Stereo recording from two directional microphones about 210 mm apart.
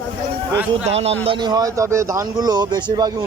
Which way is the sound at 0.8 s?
30° right (ahead or behind).